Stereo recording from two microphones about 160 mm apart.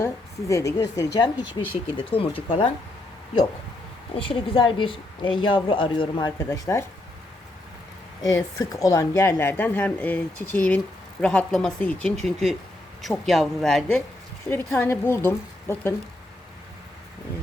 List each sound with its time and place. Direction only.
0.0 s a woman's voice: 20° left (ahead or behind); by 2.6 s 35° left (ahead or behind)
4.3 s a woman's voice: 35° left (ahead or behind)
8.2 s speech: 20° left (ahead or behind); by 14.0 s 5° left (ahead or behind)
14.5 s speech: 15° left (ahead or behind)